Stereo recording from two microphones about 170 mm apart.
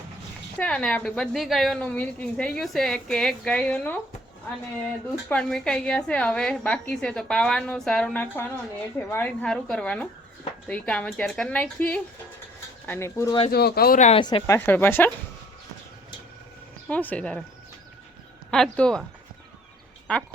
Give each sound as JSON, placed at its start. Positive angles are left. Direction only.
{"t": 0.6, "sound": "a woman's voice", "side_deg": 5}
{"t": 5.3, "sound": "a woman's voice", "side_deg": 5}
{"t": 13.5, "sound": "speech", "side_deg": 70}
{"t": 14.0, "sound": "speech", "side_deg": 35}
{"t": 14.3, "sound": "a woman's voice", "side_deg": 20}
{"t": 16.9, "sound": "a woman's voice", "side_deg": 10}
{"t": 18.5, "sound": "a woman's voice", "side_deg": 5}
{"t": 20.1, "sound": "a woman's voice", "side_deg": 5}